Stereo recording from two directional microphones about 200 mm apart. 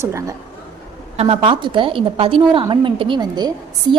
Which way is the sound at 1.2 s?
30° right (ahead or behind).